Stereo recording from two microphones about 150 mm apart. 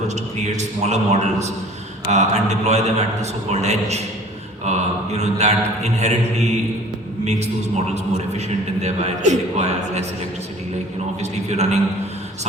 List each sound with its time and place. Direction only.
0.1 s a man's voice: 50° right (ahead or behind)
8.8 s a man's voice: 50° right (ahead or behind)
11.2 s a man's voice: 50° right (ahead or behind)